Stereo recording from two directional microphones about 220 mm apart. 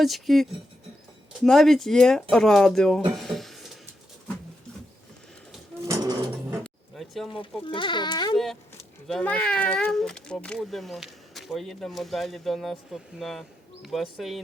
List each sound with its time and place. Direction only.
0.0 s speech: centre (ahead or behind)
1.5 s speech: centre (ahead or behind)
3.1 s a sound: centre (ahead or behind)
5.8 s a sound: 15° right (ahead or behind)
6.6 s music: centre (ahead or behind)
7.7 s speech: 20° left (ahead or behind)
9.0 s speech: 5° left (ahead or behind)